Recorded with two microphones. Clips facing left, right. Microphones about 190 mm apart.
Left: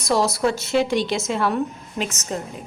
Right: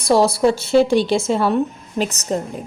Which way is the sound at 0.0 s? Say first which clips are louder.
Right 5 dB; 30° right (ahead or behind).